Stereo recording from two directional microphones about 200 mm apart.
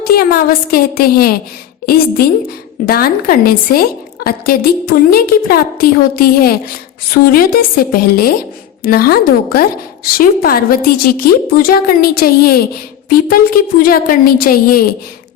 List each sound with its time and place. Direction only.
0.0 s a woman's voice: 50° left (ahead or behind)
2.8 s a woman's voice: 50° left (ahead or behind)